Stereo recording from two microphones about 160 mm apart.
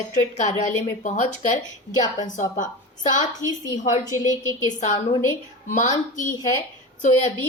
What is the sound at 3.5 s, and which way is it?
Speech, 25° left (ahead or behind).